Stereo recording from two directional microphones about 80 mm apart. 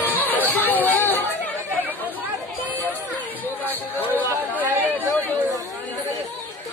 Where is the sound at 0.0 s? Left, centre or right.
Left.